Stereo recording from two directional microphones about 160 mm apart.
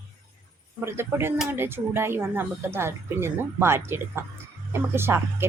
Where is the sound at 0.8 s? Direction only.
15° right (ahead or behind).